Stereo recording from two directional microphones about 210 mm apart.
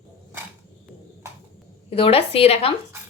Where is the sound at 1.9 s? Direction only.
25° left (ahead or behind).